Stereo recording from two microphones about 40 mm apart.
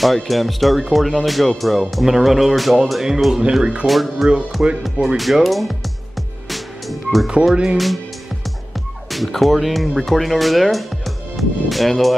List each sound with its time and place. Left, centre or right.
0.0 s speech: centre
4.6 s speech: right
5.0 s speech: centre
6.5 s music: centre
7.7 s speech: centre
9.1 s speech: centre